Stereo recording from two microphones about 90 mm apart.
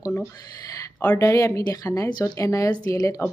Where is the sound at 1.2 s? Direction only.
35° left (ahead or behind).